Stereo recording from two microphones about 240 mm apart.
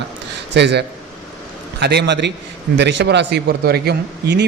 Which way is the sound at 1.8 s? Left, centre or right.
Right.